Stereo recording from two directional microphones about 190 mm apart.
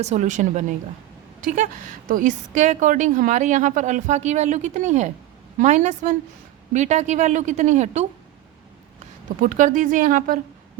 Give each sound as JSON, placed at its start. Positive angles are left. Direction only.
{"t": 0.0, "sound": "a woman's voice", "side_deg": -35}
{"t": 9.4, "sound": "speech", "side_deg": -45}